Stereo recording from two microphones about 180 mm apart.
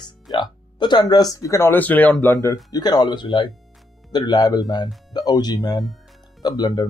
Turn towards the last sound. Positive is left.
turn(degrees=20)  # may be behind; listen again after turning